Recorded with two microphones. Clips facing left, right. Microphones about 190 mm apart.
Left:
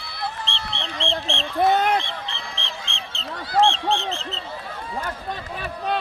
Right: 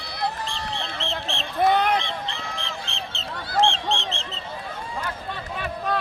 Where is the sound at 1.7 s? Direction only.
45° left (ahead or behind).